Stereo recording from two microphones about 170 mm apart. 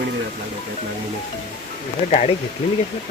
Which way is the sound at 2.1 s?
40° left (ahead or behind).